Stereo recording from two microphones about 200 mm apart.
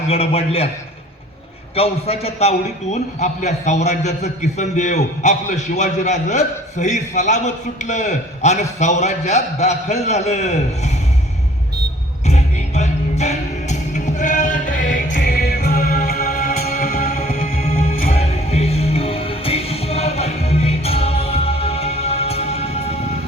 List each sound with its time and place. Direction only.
0.1 s a man's voice: 30° left (ahead or behind)
1.7 s a man's voice: 30° left (ahead or behind)
12.2 s music: 35° left (ahead or behind)
15.2 s music: 55° left (ahead or behind)
18.1 s music: 30° left (ahead or behind)